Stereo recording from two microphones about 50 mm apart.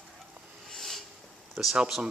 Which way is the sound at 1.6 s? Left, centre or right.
Right.